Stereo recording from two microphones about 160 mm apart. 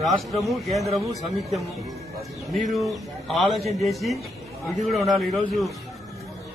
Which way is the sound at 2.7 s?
Centre (ahead or behind).